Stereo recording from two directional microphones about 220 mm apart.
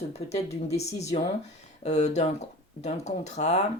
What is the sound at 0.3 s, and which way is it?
Speech, 30° left (ahead or behind).